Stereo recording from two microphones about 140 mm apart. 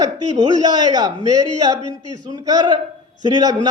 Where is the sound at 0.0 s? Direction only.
30° right (ahead or behind).